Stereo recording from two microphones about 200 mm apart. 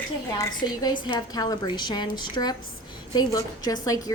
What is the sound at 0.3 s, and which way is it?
A woman's voice, 20° left (ahead or behind).